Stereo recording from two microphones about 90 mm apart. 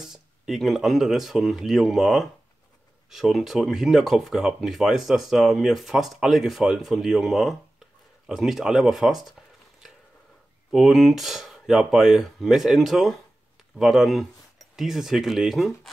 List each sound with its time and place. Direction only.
0.0 s speech: 5° right (ahead or behind)
10.7 s speech: 5° right (ahead or behind)